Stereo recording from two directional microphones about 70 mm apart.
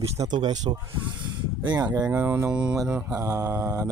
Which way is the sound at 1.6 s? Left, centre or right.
Right.